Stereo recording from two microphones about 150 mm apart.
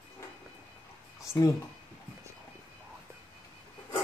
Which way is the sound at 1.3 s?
5° right (ahead or behind).